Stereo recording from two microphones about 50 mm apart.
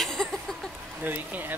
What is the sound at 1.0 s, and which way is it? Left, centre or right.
Speech, right.